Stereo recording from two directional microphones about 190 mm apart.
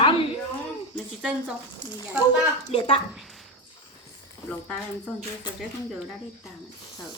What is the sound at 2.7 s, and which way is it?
Speech, 30° left (ahead or behind).